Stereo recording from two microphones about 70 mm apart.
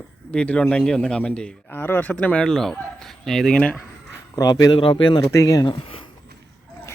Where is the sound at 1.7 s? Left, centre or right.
Left.